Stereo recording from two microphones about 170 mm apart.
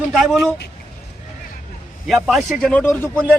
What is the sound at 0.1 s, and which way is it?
Speech, centre (ahead or behind).